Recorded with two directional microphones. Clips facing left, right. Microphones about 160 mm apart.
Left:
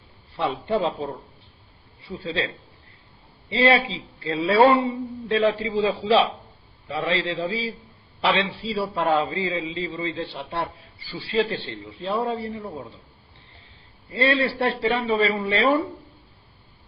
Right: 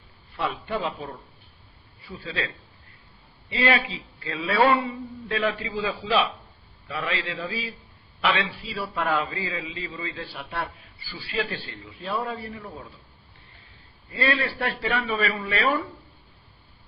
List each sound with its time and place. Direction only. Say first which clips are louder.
0.3 s a man's voice: left 5 dB; 30° left (ahead or behind)
3.5 s a man's voice: left 5 dB; 30° left (ahead or behind)
14.1 s a man's voice: left 4 dB; 25° left (ahead or behind)